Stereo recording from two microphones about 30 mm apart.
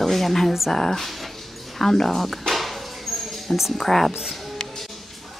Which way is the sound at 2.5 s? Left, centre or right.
Centre.